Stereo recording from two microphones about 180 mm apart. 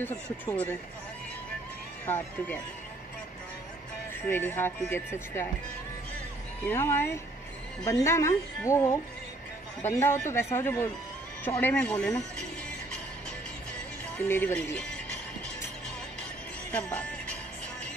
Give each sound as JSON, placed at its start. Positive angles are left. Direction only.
{"t": 0.0, "sound": "speech", "side_deg": 15}
{"t": 2.0, "sound": "speech", "side_deg": 10}
{"t": 4.3, "sound": "speech", "side_deg": 10}
{"t": 6.6, "sound": "speech", "side_deg": 15}
{"t": 14.1, "sound": "speech", "side_deg": 10}
{"t": 16.7, "sound": "speech", "side_deg": 5}